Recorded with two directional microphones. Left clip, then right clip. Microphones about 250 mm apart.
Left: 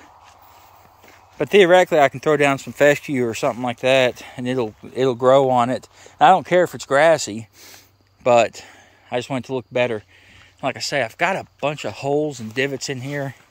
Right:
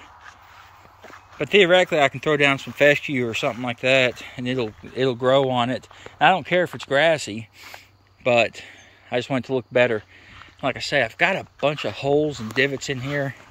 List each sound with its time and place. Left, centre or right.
1.4 s speech: left